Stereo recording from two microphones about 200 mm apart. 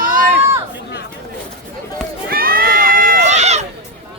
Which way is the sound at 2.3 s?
50° right (ahead or behind).